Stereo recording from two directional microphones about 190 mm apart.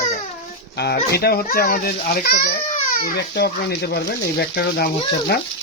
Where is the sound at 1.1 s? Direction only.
55° left (ahead or behind).